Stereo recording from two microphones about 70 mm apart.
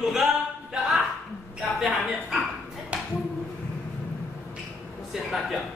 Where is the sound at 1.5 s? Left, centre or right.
Centre.